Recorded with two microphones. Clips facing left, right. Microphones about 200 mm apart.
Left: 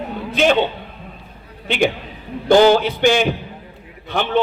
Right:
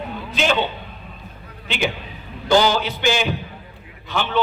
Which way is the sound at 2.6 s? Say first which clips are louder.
Left 7 dB; 55° left (ahead or behind).